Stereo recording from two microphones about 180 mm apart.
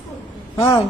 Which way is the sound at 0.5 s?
30° left (ahead or behind).